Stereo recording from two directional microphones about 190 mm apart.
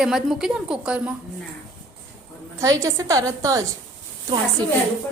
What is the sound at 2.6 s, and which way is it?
A woman's voice, 15° right (ahead or behind).